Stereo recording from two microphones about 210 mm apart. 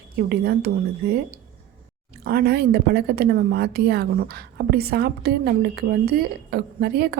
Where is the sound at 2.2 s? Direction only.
45° right (ahead or behind).